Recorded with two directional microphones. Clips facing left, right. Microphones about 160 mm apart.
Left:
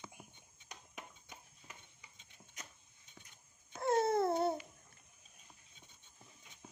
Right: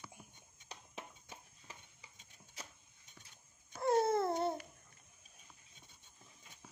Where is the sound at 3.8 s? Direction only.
Centre (ahead or behind).